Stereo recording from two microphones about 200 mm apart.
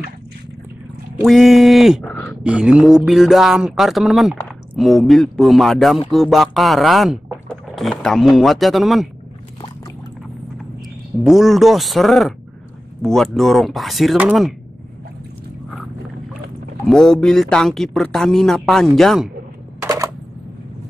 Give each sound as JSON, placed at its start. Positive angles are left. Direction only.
{"t": 1.2, "sound": "speech", "side_deg": 0}
{"t": 11.2, "sound": "speech", "side_deg": 0}
{"t": 16.8, "sound": "speech", "side_deg": 5}
{"t": 19.8, "sound": "a sound", "side_deg": -15}